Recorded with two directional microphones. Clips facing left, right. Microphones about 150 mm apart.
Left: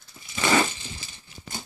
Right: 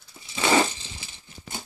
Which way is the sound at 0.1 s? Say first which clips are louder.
Right 1 dB; 15° right (ahead or behind).